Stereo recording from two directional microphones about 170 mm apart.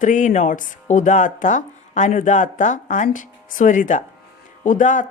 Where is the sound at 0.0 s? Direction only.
50° left (ahead or behind).